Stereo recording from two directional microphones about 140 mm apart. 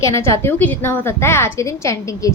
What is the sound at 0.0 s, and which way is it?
A woman's voice, 20° left (ahead or behind).